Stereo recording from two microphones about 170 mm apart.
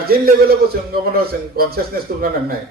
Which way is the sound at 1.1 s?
65° right (ahead or behind).